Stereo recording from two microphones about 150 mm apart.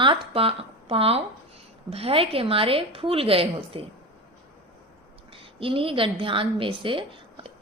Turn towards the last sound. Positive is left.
turn(degrees=-35)  # may be behind; listen again after turning